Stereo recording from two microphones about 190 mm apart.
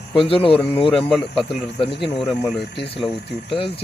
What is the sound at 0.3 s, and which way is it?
Speech, 30° left (ahead or behind).